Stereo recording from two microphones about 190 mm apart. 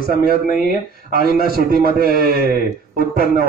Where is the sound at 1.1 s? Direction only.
50° right (ahead or behind).